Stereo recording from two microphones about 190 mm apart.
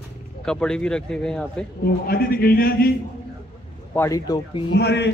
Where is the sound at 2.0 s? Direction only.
55° left (ahead or behind).